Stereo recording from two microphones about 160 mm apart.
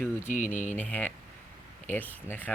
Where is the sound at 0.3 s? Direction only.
50° left (ahead or behind).